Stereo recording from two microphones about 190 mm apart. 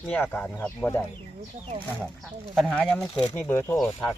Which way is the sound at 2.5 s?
Centre (ahead or behind).